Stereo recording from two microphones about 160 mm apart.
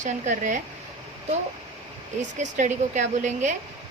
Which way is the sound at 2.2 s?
50° right (ahead or behind).